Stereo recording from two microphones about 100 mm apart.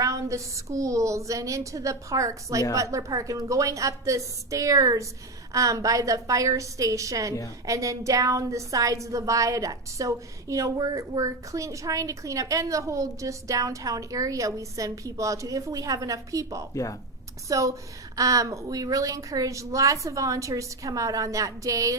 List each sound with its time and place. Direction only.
0.0 s a woman's voice: 30° right (ahead or behind)
16.7 s speech: 35° left (ahead or behind)
17.5 s a woman's voice: 35° right (ahead or behind)